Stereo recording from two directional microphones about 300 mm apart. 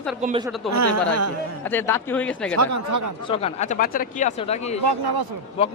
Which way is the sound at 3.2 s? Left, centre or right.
Centre.